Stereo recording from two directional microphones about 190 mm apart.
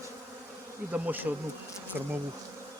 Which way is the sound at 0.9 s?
10° right (ahead or behind).